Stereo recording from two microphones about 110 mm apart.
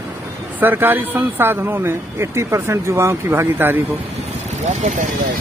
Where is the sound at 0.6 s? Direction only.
20° right (ahead or behind).